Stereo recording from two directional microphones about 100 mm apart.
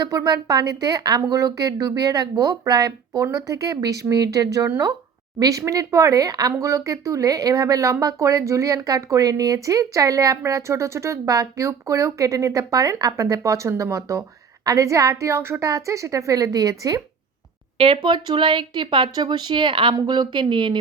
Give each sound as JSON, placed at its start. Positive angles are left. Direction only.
{"t": 0.0, "sound": "speech", "side_deg": -35}
{"t": 17.7, "sound": "speech", "side_deg": -65}
{"t": 20.0, "sound": "speech", "side_deg": -45}